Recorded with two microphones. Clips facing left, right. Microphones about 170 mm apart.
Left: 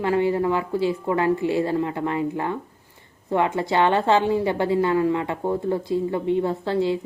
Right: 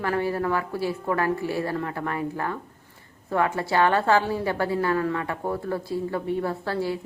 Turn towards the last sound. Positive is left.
turn(degrees=20)  # may be behind; listen again after turning